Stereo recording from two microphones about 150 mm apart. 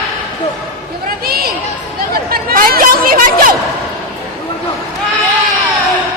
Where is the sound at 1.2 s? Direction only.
90° right.